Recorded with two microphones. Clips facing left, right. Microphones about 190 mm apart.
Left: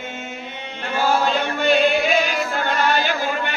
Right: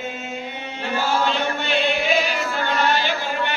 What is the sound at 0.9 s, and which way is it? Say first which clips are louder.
Chant: left 3 dB; 40° left (ahead or behind).